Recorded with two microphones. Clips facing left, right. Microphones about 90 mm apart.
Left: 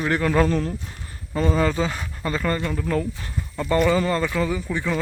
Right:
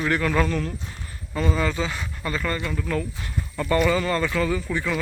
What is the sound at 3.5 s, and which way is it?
Speech, 20° left (ahead or behind).